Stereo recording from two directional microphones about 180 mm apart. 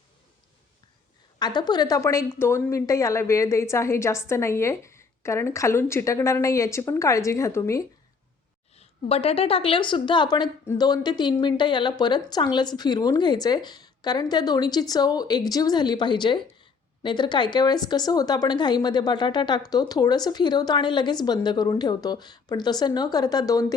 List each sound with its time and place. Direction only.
1.4 s a woman's voice: 25° left (ahead or behind)
8.7 s a woman's voice: 35° left (ahead or behind)